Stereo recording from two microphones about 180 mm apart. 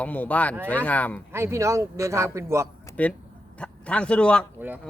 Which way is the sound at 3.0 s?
10° left (ahead or behind).